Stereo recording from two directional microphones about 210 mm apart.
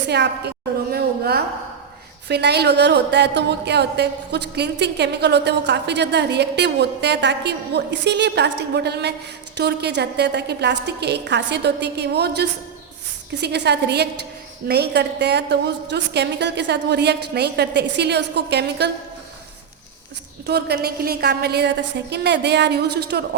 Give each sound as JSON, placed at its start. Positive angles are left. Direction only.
{"t": 0.1, "sound": "a sound", "side_deg": -50}
{"t": 2.2, "sound": "a woman's voice", "side_deg": -50}
{"t": 20.5, "sound": "a woman's voice", "side_deg": -50}